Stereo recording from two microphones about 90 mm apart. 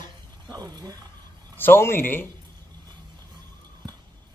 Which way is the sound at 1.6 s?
25° left (ahead or behind).